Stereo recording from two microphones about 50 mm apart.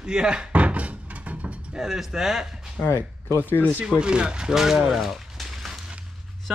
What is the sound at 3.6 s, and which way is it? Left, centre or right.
Speech, right.